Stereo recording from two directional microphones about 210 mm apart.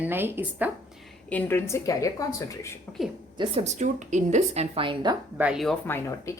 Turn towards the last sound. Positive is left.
turn(degrees=10)  # may be behind; listen again after turning